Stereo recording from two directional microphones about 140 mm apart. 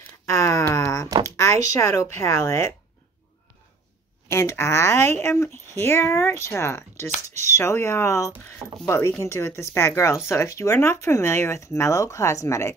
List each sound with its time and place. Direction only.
0.3 s wail: 20° left (ahead or behind)
1.2 s speech: 20° left (ahead or behind)
4.3 s speech: 20° left (ahead or behind)